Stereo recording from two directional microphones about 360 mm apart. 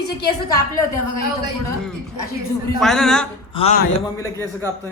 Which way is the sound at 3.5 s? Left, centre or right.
Centre.